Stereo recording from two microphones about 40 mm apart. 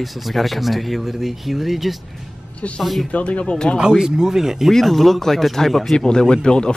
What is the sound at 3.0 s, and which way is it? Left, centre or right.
Speech, left.